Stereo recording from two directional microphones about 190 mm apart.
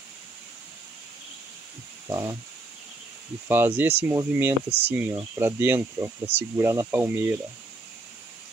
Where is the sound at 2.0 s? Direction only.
15° right (ahead or behind).